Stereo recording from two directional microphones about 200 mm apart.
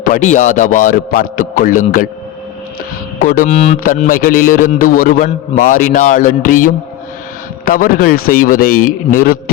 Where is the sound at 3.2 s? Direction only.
45° left (ahead or behind).